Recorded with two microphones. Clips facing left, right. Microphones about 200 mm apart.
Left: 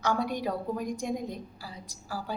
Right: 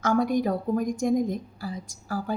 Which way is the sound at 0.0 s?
50° right (ahead or behind).